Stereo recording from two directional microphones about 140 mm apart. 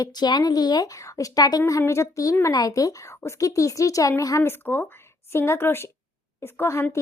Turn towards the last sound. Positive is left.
turn(degrees=20)  # may be behind; listen again after turning